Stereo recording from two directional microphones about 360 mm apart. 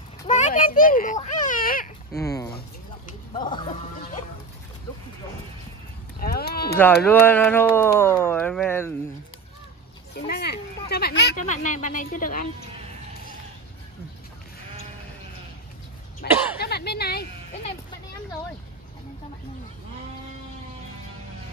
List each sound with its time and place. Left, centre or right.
0.3 s a sound: left
2.1 s speech: centre
6.1 s a sound: left
6.8 s speech: centre
10.1 s speech: left
16.2 s speech: left